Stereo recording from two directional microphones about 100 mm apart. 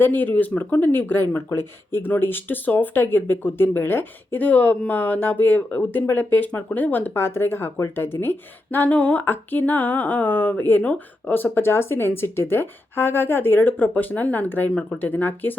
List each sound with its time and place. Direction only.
0.0 s speech: 20° left (ahead or behind)